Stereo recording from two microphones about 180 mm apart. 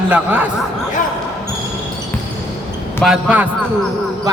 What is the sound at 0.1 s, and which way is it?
Speech, 10° right (ahead or behind).